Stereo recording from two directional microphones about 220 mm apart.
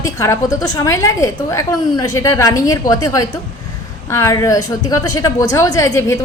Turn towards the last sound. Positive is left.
turn(degrees=15)  # may be behind; listen again after turning